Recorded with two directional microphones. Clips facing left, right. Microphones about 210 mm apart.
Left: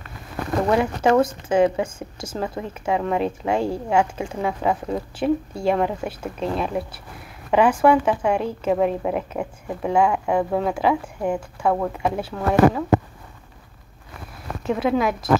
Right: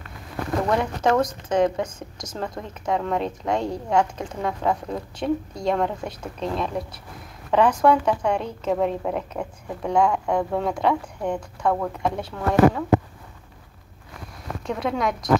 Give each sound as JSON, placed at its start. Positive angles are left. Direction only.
{"t": 0.7, "sound": "speech", "side_deg": 5}
{"t": 14.7, "sound": "a woman's voice", "side_deg": 5}